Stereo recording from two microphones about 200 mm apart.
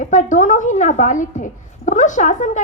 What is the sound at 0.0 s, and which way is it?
A woman's voice, 40° left (ahead or behind).